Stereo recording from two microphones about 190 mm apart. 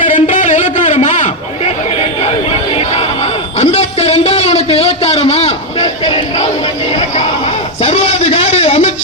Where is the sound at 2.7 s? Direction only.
30° left (ahead or behind).